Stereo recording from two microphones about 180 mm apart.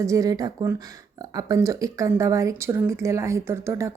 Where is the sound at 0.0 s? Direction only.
20° right (ahead or behind).